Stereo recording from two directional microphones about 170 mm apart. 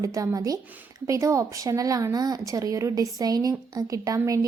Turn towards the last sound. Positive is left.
turn(degrees=-20)  # may be behind; listen again after turning